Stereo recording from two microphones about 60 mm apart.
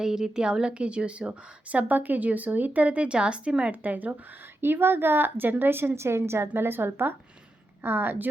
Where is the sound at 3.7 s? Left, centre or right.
Right.